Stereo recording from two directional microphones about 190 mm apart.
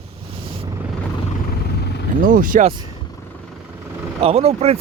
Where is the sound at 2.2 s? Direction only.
45° right (ahead or behind).